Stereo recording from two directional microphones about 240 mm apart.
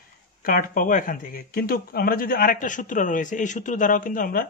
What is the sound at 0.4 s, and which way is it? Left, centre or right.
Speech, left.